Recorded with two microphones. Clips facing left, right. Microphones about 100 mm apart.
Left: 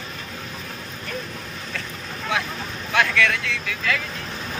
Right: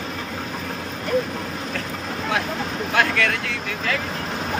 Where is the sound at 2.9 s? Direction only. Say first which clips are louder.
Left 1 dB; 40° right (ahead or behind).